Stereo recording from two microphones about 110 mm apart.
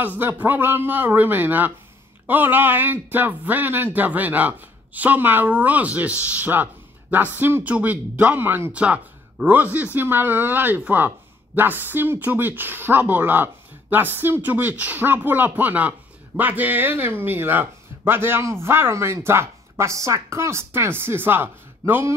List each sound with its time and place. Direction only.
0.0 s speech: 20° right (ahead or behind)